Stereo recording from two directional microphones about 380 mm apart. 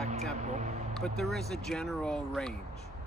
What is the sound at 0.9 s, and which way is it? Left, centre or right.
Speech, centre.